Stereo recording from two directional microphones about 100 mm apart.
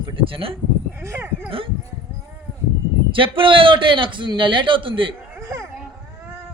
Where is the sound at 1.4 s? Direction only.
65° right (ahead or behind).